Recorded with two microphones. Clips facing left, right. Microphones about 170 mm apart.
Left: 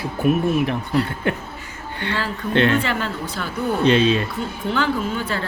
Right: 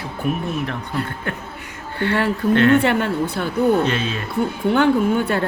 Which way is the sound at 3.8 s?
20° left (ahead or behind).